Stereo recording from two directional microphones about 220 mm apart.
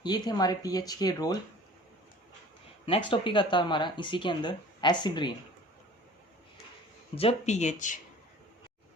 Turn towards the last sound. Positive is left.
turn(degrees=35)  # may be behind; listen again after turning